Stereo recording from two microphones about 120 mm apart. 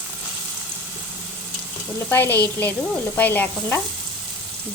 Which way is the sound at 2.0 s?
15° left (ahead or behind).